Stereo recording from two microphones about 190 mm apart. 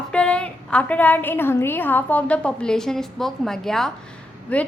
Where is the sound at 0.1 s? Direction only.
5° left (ahead or behind).